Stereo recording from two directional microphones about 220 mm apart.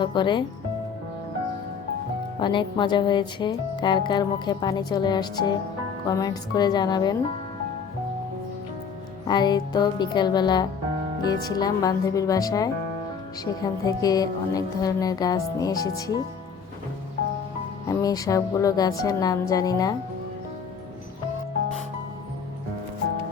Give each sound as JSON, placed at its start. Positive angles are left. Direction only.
{"t": 0.0, "sound": "speech", "side_deg": 20}
{"t": 2.4, "sound": "speech", "side_deg": 20}
{"t": 9.2, "sound": "speech", "side_deg": 20}
{"t": 17.8, "sound": "speech", "side_deg": 15}